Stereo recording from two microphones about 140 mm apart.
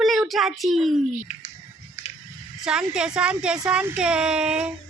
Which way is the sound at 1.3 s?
55° left (ahead or behind).